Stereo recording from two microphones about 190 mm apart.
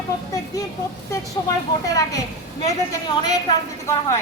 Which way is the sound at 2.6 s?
20° left (ahead or behind).